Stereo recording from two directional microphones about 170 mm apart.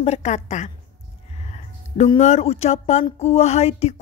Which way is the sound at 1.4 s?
40° left (ahead or behind).